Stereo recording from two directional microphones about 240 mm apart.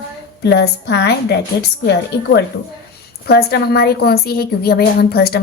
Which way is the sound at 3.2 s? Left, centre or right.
Left.